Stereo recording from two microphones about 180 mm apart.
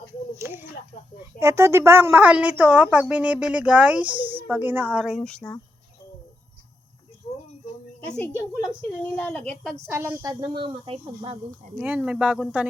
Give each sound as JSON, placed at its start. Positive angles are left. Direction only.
{"t": 0.3, "sound": "a woman's voice", "side_deg": -10}
{"t": 8.1, "sound": "speech", "side_deg": 10}
{"t": 9.8, "sound": "speech", "side_deg": -15}
{"t": 11.8, "sound": "speech", "side_deg": -5}